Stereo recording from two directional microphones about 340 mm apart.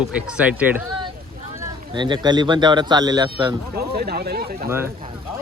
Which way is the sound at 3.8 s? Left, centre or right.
Right.